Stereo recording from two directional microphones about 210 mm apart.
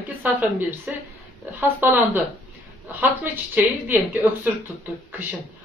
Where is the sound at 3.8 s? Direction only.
10° right (ahead or behind).